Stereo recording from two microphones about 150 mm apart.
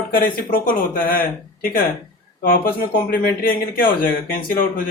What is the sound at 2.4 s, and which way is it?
Speech, 75° left (ahead or behind).